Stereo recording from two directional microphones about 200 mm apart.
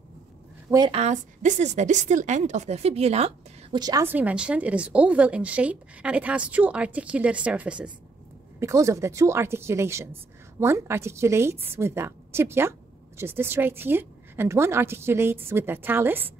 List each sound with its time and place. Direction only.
0.7 s a woman's voice: 20° right (ahead or behind)
1.0 s a woman's voice: 35° right (ahead or behind)
3.8 s speech: 15° right (ahead or behind)